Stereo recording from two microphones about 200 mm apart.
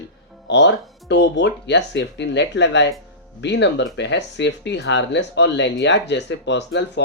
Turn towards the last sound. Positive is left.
turn(degrees=60)  # may be behind; listen again after turning